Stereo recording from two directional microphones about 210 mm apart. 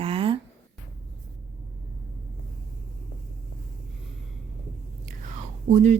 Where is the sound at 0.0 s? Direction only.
25° right (ahead or behind).